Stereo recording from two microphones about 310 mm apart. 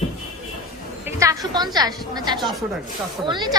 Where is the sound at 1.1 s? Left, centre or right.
Centre.